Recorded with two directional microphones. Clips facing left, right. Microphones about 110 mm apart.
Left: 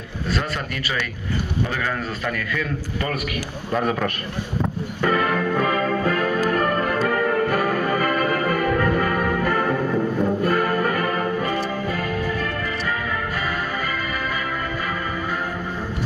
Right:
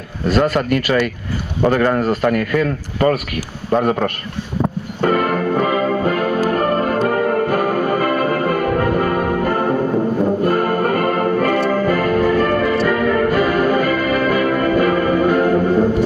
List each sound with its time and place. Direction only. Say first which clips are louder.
0.3 s a man's voice: right 11 dB; 60° right (ahead or behind)
3.8 s a man's voice: right 2 dB; 40° right (ahead or behind)
4.6 s music: right 6 dB; 40° right (ahead or behind)
5.7 s music: right 4 dB; 30° right (ahead or behind)
6.0 s music: right 4 dB; 45° right (ahead or behind)
10.4 s music: right 4 dB; 45° right (ahead or behind)